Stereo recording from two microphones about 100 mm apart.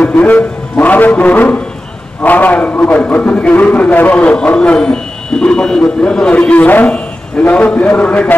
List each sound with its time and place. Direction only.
0.0 s a man's voice: 15° left (ahead or behind)